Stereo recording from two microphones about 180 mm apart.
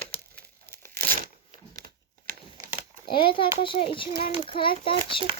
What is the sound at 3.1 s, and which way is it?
A child's voice, 30° left (ahead or behind).